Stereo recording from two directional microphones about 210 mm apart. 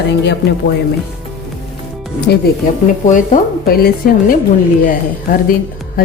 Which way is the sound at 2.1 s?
50° left (ahead or behind).